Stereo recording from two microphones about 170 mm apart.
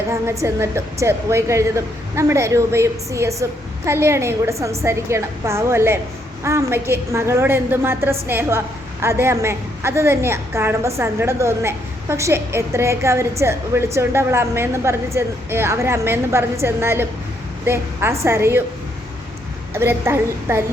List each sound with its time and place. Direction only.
0.1 s a woman's voice: 15° right (ahead or behind)
19.7 s a woman's voice: 15° right (ahead or behind)